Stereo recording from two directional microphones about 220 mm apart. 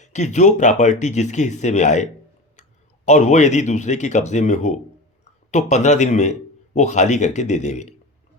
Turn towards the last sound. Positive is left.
turn(degrees=30)  # may be behind; listen again after turning